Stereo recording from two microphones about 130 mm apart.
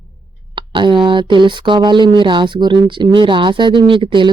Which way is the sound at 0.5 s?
40° right (ahead or behind).